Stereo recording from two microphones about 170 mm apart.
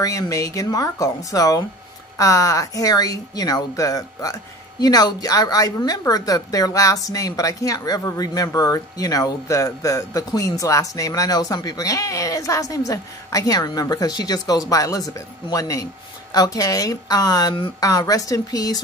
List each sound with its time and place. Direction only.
0.0 s speech: 20° left (ahead or behind)